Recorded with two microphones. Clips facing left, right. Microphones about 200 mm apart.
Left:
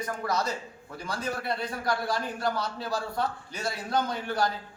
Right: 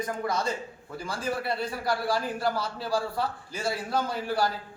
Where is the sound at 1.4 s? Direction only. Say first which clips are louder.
Right 2 dB; 5° right (ahead or behind).